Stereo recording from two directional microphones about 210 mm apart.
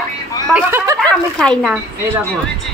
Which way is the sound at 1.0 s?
5° left (ahead or behind).